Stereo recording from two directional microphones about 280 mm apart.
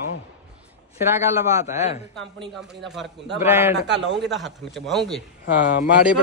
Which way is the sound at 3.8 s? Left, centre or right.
Right.